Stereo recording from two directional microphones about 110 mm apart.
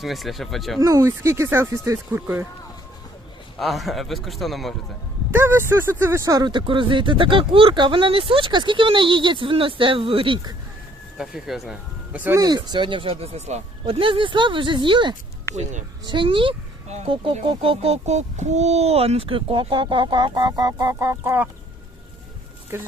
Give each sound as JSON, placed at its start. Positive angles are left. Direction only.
{"t": 0.0, "sound": "a man's voice", "side_deg": 0}
{"t": 0.8, "sound": "speech", "side_deg": -30}
{"t": 3.6, "sound": "a man's voice", "side_deg": 0}
{"t": 5.3, "sound": "speech", "side_deg": -20}
{"t": 11.2, "sound": "a man's voice", "side_deg": -5}
{"t": 12.1, "sound": "speech", "side_deg": -15}
{"t": 12.4, "sound": "speech", "side_deg": -40}
{"t": 14.0, "sound": "speech", "side_deg": -50}
{"t": 15.5, "sound": "speech", "side_deg": 20}
{"t": 16.0, "sound": "speech", "side_deg": -50}
{"t": 20.5, "sound": "fowl", "side_deg": -35}
{"t": 22.7, "sound": "speech", "side_deg": -25}